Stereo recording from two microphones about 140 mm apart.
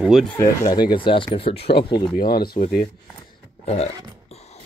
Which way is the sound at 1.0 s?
35° left (ahead or behind).